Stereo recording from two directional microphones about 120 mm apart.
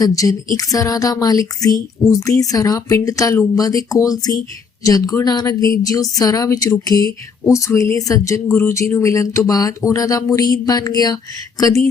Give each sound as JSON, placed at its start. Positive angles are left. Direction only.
{"t": 0.0, "sound": "a woman's voice", "side_deg": 30}